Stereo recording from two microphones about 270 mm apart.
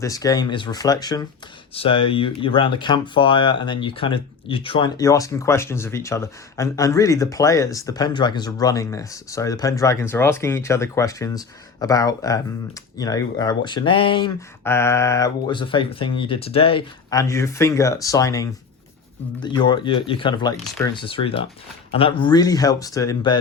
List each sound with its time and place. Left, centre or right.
0.0 s speech: centre